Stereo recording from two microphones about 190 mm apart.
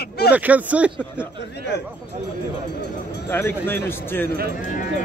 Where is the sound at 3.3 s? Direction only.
10° left (ahead or behind).